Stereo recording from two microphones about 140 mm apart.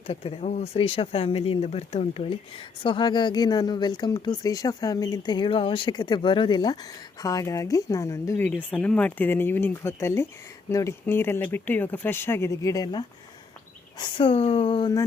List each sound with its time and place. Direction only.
0.1 s speech: 45° left (ahead or behind); by 8.4 s 20° left (ahead or behind)
8.4 s speech: 10° left (ahead or behind); by 14.9 s 35° left (ahead or behind)